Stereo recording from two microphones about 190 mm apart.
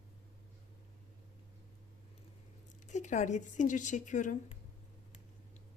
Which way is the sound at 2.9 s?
40° left (ahead or behind).